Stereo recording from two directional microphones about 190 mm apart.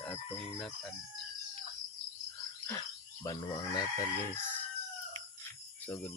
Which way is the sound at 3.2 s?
20° left (ahead or behind).